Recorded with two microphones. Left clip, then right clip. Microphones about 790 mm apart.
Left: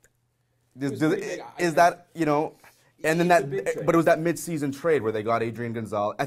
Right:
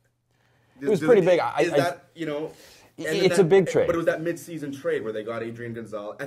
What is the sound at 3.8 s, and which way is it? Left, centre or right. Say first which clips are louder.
A man's voice: left 3 dB; left.